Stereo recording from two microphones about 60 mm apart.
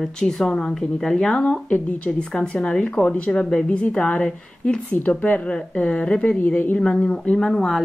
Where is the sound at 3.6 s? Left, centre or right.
Left.